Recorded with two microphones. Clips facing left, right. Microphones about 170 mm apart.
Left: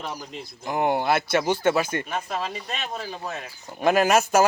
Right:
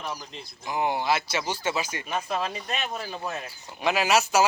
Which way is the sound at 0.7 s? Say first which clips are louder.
Left 3 dB; 55° left (ahead or behind).